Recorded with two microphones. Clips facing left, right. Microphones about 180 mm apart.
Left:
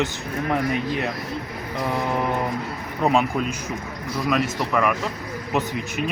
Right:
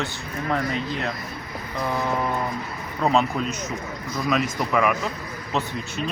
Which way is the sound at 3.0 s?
10° left (ahead or behind).